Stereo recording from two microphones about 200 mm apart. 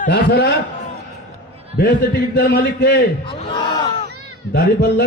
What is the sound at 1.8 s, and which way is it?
A man's voice, 50° left (ahead or behind).